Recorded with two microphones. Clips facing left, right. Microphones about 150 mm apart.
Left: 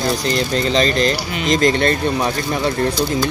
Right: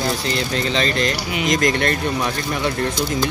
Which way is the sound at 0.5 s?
35° left (ahead or behind).